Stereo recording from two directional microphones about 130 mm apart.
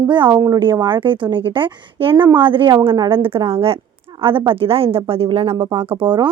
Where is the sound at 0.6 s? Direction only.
40° right (ahead or behind).